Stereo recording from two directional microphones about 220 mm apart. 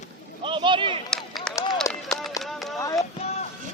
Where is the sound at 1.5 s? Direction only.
15° left (ahead or behind).